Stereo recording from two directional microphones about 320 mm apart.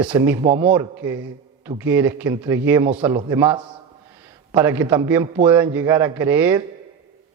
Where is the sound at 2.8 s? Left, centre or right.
Right.